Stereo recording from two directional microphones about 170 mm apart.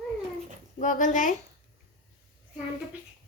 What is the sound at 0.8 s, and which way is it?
Speech, 50° left (ahead or behind).